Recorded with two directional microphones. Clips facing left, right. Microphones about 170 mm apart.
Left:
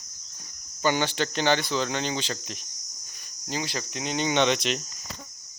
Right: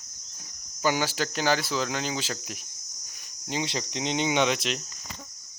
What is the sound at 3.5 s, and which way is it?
Speech, 20° right (ahead or behind).